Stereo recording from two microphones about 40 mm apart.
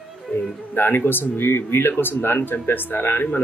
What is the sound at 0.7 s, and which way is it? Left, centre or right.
Speech, left.